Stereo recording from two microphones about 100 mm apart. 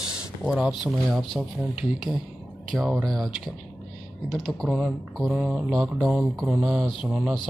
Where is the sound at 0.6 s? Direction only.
5° right (ahead or behind).